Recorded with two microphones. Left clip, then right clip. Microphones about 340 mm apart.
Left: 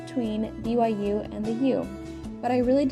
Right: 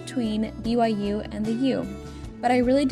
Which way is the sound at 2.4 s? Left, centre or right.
Right.